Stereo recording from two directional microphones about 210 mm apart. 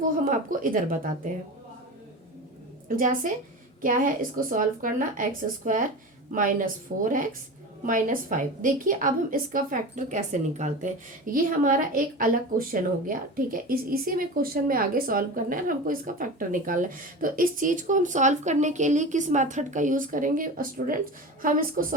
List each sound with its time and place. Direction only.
0.3 s a woman's voice: 40° right (ahead or behind)
2.9 s a woman's voice: 40° right (ahead or behind)
6.3 s a woman's voice: 40° right (ahead or behind)